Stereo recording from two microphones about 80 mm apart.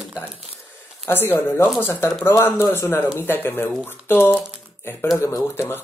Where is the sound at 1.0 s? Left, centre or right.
Left.